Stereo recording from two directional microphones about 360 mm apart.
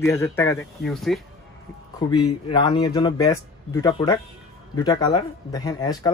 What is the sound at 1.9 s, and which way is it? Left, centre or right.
Speech, centre.